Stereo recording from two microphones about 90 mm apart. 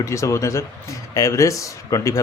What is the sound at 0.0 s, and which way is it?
Speech, 35° left (ahead or behind).